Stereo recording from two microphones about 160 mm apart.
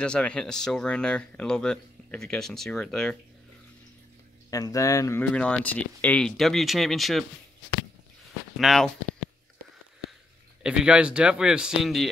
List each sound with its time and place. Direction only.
0.0 s speech: 5° left (ahead or behind)
4.5 s speech: 20° left (ahead or behind)
5.2 s speech: 10° left (ahead or behind)
8.5 s speech: centre (ahead or behind)
10.6 s speech: 5° right (ahead or behind)